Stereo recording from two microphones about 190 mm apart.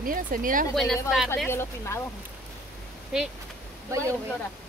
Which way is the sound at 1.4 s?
15° left (ahead or behind).